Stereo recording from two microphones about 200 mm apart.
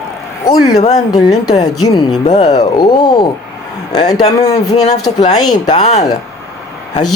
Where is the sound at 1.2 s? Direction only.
20° left (ahead or behind).